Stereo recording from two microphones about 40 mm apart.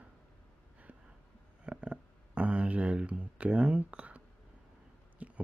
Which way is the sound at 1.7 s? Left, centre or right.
Right.